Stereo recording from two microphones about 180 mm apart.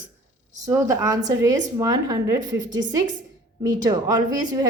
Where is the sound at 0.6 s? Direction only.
15° right (ahead or behind).